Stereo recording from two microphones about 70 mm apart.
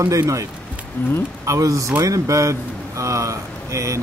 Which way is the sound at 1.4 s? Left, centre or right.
Right.